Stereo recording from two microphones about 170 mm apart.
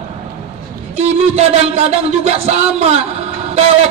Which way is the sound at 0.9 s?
40° right (ahead or behind).